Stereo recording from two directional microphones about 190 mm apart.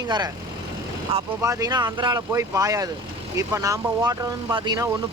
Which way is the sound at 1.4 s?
15° right (ahead or behind).